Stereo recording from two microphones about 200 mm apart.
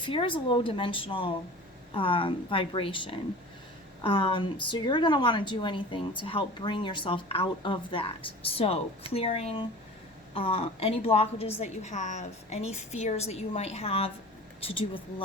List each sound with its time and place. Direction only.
0.0 s a woman's voice: 25° left (ahead or behind)